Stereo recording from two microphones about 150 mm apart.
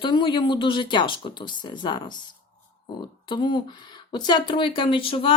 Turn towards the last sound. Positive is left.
turn(degrees=35)  # may be behind; listen again after turning